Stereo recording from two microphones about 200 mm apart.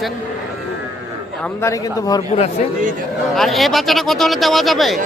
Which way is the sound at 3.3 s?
Centre (ahead or behind).